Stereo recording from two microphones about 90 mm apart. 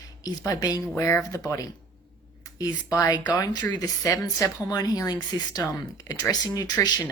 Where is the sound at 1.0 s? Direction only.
30° left (ahead or behind).